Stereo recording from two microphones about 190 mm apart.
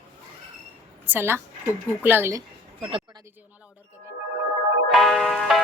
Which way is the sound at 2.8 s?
30° right (ahead or behind).